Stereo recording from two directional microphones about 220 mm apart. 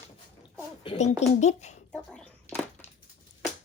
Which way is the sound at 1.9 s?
5° left (ahead or behind).